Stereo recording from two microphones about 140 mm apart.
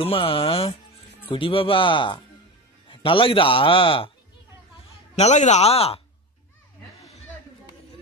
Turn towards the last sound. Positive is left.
turn(degrees=50)  # may be behind; listen again after turning